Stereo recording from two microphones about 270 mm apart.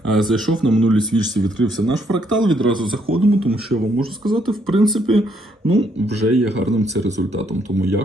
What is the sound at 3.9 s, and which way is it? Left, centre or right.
A man's voice, centre.